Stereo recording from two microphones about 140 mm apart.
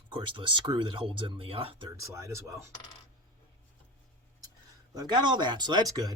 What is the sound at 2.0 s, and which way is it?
Speech, 20° right (ahead or behind).